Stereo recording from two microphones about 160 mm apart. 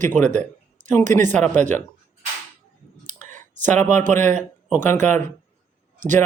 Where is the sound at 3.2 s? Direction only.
50° right (ahead or behind).